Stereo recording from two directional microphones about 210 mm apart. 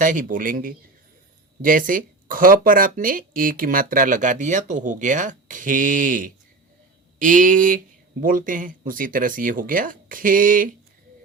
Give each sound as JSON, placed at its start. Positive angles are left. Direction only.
{"t": 0.0, "sound": "speech", "side_deg": -40}